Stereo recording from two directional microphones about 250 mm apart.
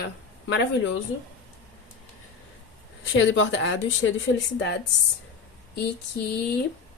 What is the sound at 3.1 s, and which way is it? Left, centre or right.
Speech, left.